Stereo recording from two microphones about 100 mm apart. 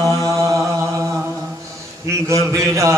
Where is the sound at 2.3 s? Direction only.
30° right (ahead or behind).